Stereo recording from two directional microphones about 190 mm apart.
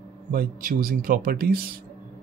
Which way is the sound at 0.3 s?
50° right (ahead or behind).